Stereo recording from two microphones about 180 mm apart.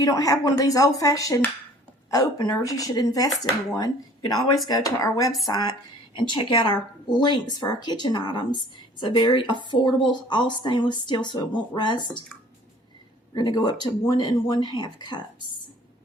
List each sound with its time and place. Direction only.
0.0 s a woman's voice: 20° left (ahead or behind)
13.3 s a woman's voice: 20° left (ahead or behind)